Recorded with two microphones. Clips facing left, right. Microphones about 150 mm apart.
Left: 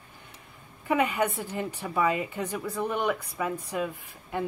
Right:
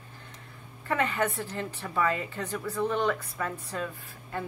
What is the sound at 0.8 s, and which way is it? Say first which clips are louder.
A woman's voice: left 3 dB; 15° left (ahead or behind).